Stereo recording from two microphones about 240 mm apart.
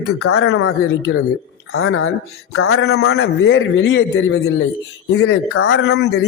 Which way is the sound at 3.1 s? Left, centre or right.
Left.